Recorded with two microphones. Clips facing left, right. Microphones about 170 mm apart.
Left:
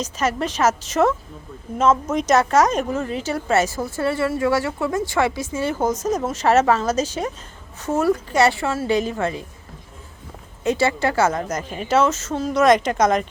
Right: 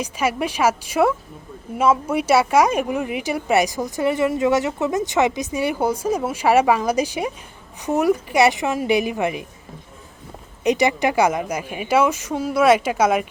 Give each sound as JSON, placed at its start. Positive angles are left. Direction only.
{"t": 0.0, "sound": "speech", "side_deg": -10}
{"t": 10.6, "sound": "speech", "side_deg": -15}